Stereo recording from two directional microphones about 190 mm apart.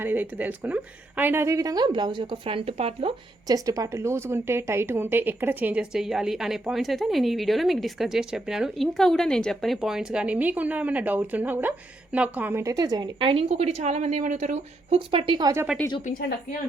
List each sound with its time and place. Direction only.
0.0 s a woman's voice: 10° right (ahead or behind); by 3.2 s 30° right (ahead or behind)
3.4 s a woman's voice: 20° right (ahead or behind)